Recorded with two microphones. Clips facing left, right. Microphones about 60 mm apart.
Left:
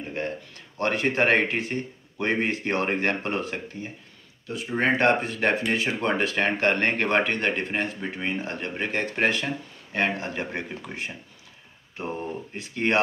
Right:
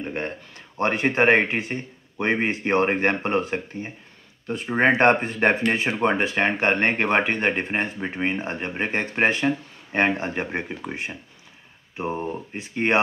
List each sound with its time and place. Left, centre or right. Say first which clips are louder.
0.6 s speech: right 3 dB; right
4.5 s speech: right 4 dB; right